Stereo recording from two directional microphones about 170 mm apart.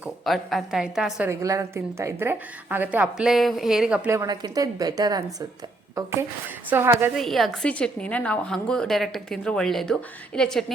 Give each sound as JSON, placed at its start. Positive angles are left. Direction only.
{"t": 0.0, "sound": "a woman's voice", "side_deg": 0}
{"t": 1.3, "sound": "a woman's voice", "side_deg": -20}
{"t": 4.1, "sound": "a woman's voice", "side_deg": -20}
{"t": 7.2, "sound": "a woman's voice", "side_deg": 0}